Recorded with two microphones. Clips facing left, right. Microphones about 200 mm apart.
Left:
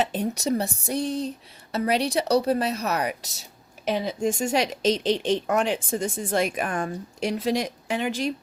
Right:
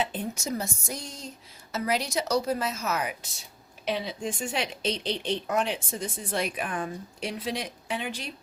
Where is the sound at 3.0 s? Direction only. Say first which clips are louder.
Left 5 dB; 40° left (ahead or behind).